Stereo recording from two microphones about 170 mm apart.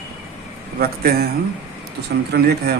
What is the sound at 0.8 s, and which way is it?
Speech, 65° right (ahead or behind).